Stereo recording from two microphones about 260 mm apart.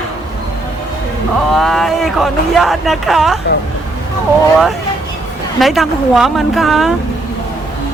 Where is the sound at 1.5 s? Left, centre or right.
Centre.